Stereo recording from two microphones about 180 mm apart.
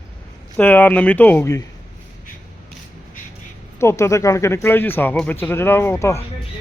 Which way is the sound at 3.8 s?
15° left (ahead or behind).